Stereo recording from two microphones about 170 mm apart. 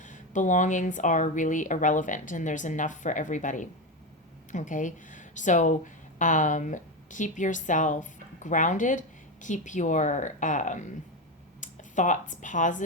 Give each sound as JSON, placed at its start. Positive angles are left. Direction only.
{"t": 0.0, "sound": "speech", "side_deg": 45}